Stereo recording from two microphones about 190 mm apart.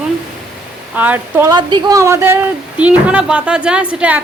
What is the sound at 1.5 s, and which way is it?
A woman's voice, 20° right (ahead or behind).